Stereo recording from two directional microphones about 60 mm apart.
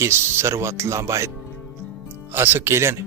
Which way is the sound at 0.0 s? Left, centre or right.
Right.